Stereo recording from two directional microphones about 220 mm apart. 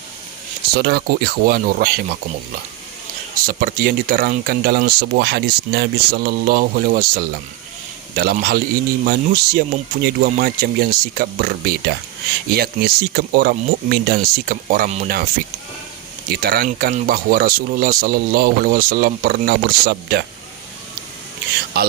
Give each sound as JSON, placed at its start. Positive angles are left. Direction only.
{"t": 0.7, "sound": "speech", "side_deg": -45}
{"t": 3.4, "sound": "speech", "side_deg": -40}
{"t": 16.3, "sound": "speech", "side_deg": -45}
{"t": 21.7, "sound": "speech", "side_deg": -45}